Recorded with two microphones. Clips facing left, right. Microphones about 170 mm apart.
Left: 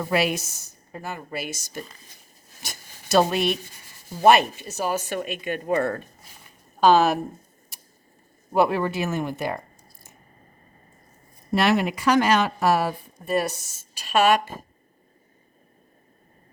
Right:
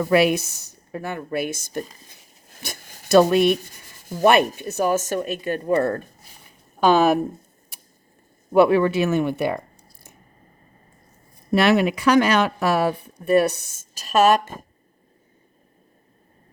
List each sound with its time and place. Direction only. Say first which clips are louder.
0.1 s speech: right 6 dB; 55° right (ahead or behind); by 6.0 s 40° right (ahead or behind)
6.7 s speech: right 1 dB; 55° right (ahead or behind)
8.5 s speech: right 6 dB; 65° right (ahead or behind)
11.5 s speech: right 4 dB; 65° right (ahead or behind); by 14.5 s 40° right (ahead or behind)